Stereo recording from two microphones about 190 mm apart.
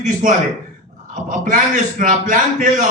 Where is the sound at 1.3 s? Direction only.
45° right (ahead or behind).